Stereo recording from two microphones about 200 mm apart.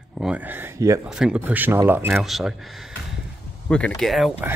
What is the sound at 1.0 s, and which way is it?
Speech, 5° right (ahead or behind).